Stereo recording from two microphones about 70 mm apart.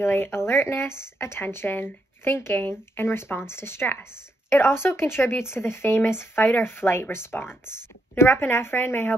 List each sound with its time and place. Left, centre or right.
0.0 s speech: left